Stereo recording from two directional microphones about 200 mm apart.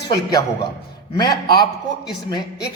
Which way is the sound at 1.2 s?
20° left (ahead or behind).